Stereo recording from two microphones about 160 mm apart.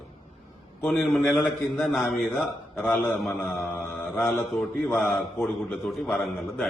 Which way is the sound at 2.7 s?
10° left (ahead or behind).